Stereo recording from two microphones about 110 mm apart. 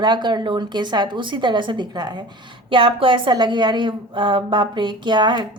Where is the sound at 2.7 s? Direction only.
50° right (ahead or behind).